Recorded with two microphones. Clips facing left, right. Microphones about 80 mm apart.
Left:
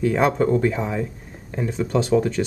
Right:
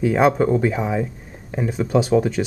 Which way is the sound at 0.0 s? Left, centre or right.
Centre.